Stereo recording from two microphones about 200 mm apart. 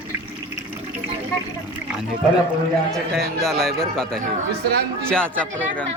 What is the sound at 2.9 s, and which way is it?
A man's voice, centre (ahead or behind).